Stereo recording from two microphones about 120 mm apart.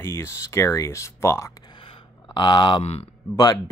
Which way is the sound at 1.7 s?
45° left (ahead or behind).